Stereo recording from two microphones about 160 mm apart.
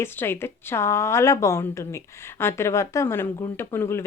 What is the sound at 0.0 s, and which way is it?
A woman's voice, 15° left (ahead or behind).